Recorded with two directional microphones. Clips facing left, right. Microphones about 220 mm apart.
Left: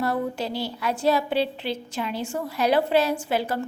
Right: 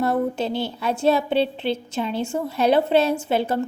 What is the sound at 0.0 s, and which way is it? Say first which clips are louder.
A woman's voice: right 4 dB; 25° right (ahead or behind).